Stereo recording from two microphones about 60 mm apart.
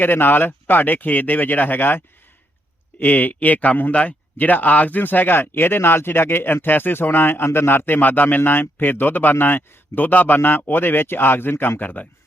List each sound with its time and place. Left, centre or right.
0.0 s a man's voice: left
3.0 s a man's voice: left